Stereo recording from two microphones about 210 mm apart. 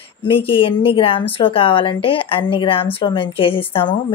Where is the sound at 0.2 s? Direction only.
25° left (ahead or behind).